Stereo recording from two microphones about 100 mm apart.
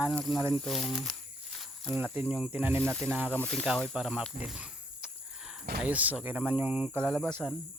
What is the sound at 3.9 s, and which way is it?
Speech, 5° right (ahead or behind).